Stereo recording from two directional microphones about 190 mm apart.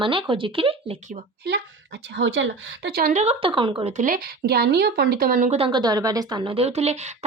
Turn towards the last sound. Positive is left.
turn(degrees=-35)  # may be behind; listen again after turning